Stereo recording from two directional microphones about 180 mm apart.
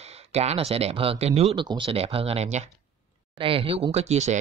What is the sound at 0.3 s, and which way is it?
Speech, 35° right (ahead or behind).